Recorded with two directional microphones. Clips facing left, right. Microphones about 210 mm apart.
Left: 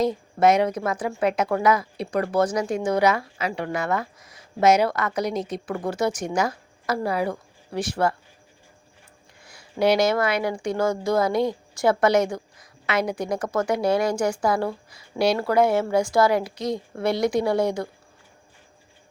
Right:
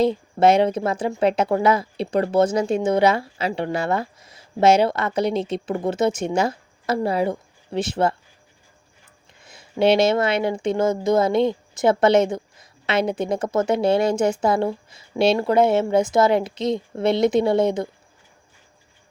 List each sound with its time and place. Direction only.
0.0 s speech: 30° right (ahead or behind)
9.4 s speech: 25° right (ahead or behind)